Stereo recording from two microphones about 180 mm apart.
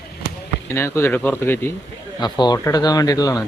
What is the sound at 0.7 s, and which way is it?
Speech, 15° left (ahead or behind).